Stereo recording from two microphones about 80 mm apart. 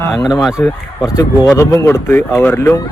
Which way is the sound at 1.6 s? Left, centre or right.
Left.